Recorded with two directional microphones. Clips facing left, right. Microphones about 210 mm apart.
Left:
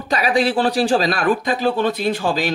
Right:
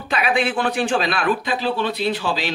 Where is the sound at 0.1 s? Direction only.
35° left (ahead or behind).